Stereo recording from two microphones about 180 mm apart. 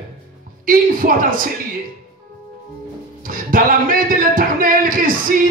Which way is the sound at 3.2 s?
50° right (ahead or behind).